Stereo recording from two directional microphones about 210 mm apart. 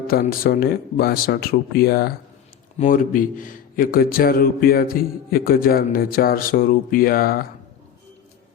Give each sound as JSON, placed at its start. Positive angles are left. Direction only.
{"t": 0.1, "sound": "speech", "side_deg": 45}